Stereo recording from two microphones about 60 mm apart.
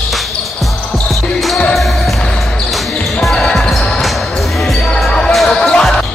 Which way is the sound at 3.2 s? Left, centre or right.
Centre.